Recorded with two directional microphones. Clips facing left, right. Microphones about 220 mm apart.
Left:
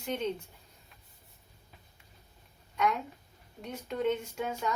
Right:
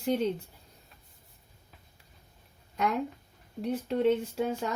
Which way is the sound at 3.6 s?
30° right (ahead or behind).